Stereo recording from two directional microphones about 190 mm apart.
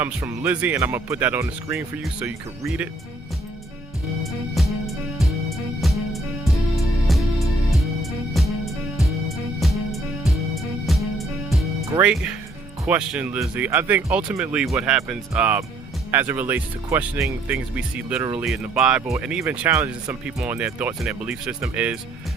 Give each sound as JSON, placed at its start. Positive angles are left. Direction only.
{"t": 0.0, "sound": "speech", "side_deg": -10}
{"t": 4.2, "sound": "music", "side_deg": 0}
{"t": 11.9, "sound": "speech", "side_deg": -5}